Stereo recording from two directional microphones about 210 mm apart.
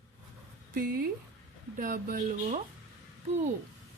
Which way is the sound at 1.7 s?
40° right (ahead or behind).